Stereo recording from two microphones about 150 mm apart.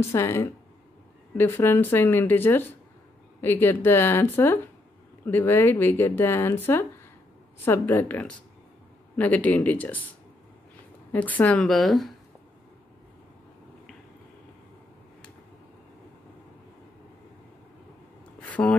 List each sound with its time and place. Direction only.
0.1 s speech: 20° left (ahead or behind)
11.1 s speech: 10° left (ahead or behind)
18.4 s a sound: 10° left (ahead or behind)